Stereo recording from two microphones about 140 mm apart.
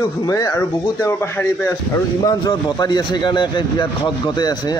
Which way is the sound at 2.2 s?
30° left (ahead or behind).